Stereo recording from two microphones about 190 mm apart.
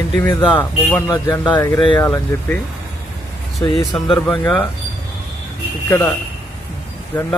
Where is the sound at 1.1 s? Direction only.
20° left (ahead or behind).